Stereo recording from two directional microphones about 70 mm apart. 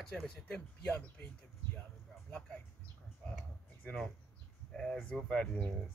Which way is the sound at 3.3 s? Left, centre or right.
Left.